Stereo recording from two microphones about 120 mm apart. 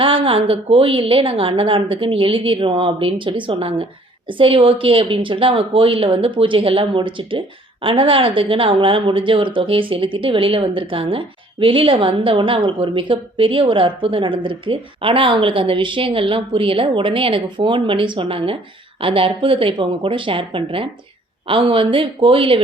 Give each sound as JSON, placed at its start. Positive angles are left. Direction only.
{"t": 0.0, "sound": "a woman's voice", "side_deg": -50}